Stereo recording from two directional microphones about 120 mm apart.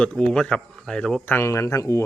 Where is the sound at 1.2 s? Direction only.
20° left (ahead or behind).